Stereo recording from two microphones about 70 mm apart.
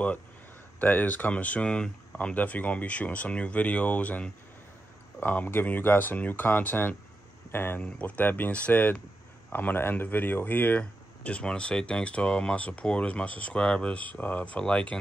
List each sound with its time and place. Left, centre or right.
0.7 s speech: left